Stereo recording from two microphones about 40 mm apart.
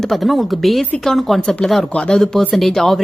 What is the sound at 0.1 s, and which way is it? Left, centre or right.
Speech, centre.